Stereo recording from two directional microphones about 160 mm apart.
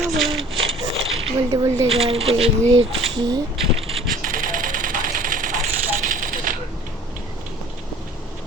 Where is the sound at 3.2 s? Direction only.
25° right (ahead or behind).